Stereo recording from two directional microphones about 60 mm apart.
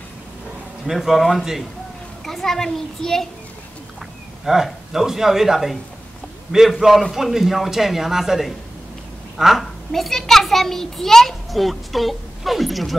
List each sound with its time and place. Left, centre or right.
0.8 s a child's voice: centre
4.5 s a child's voice: centre
7.0 s a child's voice: centre